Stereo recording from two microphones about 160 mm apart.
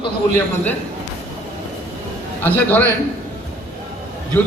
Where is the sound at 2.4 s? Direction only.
10° left (ahead or behind).